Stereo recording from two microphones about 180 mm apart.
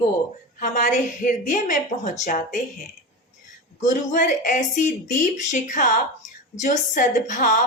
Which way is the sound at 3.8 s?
45° left (ahead or behind).